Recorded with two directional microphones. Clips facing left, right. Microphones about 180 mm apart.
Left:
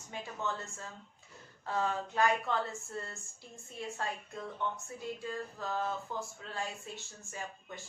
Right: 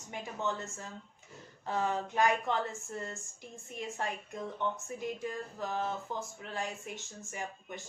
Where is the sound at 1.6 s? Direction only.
20° right (ahead or behind).